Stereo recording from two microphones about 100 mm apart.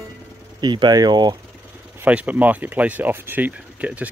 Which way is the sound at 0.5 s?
45° right (ahead or behind).